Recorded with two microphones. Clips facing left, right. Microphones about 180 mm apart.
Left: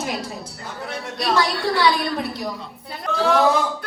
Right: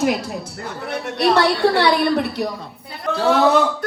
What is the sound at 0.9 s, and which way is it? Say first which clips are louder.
A woman's voice: right 6 dB; 65° right (ahead or behind).